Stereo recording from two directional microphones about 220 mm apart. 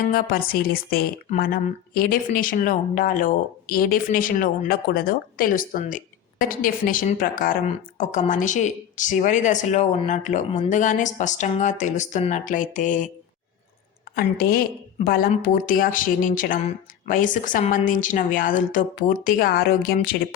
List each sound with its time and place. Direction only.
0.1 s speech: 40° left (ahead or behind)
14.2 s speech: 40° left (ahead or behind)